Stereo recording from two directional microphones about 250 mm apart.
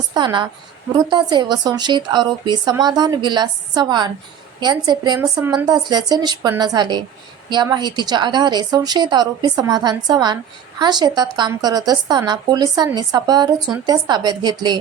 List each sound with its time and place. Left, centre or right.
0.1 s speech: centre